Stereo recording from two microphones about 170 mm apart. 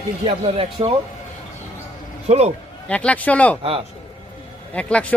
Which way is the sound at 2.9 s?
10° left (ahead or behind).